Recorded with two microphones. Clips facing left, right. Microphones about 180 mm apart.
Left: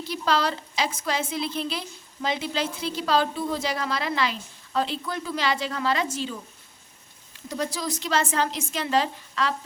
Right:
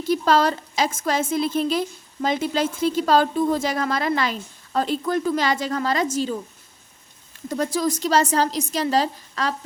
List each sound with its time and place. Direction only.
0.0 s a woman's voice: 45° right (ahead or behind)
7.4 s a woman's voice: 50° right (ahead or behind)